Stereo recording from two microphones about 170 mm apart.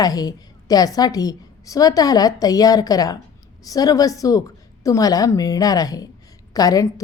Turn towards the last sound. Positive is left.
turn(degrees=20)  # may be behind; listen again after turning